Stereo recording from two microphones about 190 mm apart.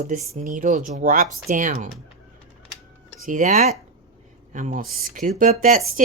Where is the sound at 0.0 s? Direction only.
40° right (ahead or behind).